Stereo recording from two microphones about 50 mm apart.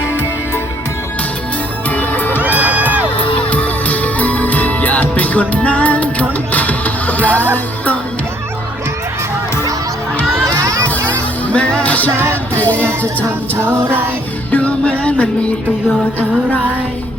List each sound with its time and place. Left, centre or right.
1.9 s music: left
2.4 s music: right
3.2 s music: left
11.5 s music: left
12.1 s music: right
13.8 s music: right
14.5 s music: left